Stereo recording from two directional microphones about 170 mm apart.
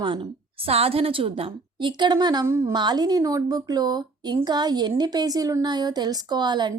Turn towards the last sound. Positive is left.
turn(degrees=-25)  # may be behind; listen again after turning